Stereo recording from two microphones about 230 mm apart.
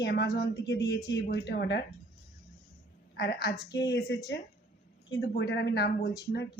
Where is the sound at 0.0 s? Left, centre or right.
Left.